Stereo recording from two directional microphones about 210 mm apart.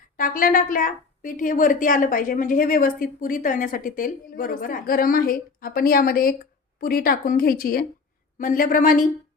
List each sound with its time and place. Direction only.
0.2 s a woman's voice: 40° left (ahead or behind)